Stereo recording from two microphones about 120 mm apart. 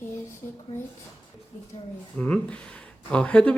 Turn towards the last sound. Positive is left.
turn(degrees=10)  # may be behind; listen again after turning